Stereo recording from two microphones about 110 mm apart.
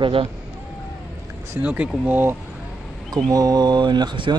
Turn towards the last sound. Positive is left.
turn(degrees=-45)  # may be behind; listen again after turning